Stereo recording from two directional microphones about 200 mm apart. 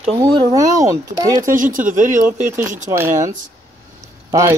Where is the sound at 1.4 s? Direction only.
40° right (ahead or behind).